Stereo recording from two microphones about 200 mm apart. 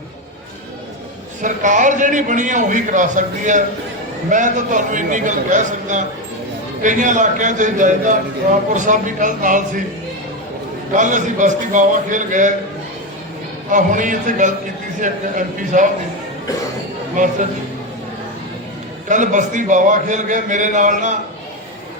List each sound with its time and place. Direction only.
1.4 s a man's voice: 40° right (ahead or behind)
10.9 s a man's voice: 40° right (ahead or behind)
13.7 s a man's voice: 40° right (ahead or behind)
17.2 s a man's voice: 40° right (ahead or behind)
19.0 s a man's voice: 40° right (ahead or behind)